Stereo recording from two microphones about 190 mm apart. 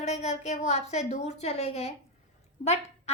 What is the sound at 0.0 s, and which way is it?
A woman's voice, 35° left (ahead or behind).